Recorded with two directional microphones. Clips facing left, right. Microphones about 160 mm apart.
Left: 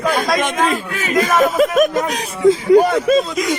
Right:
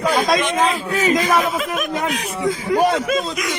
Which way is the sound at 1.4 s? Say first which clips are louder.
Left 8 dB; 45° left (ahead or behind).